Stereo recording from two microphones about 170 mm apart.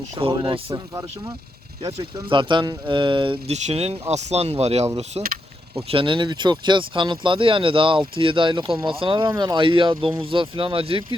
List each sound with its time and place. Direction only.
0.2 s speech: 30° right (ahead or behind)
0.7 s speech: 20° right (ahead or behind)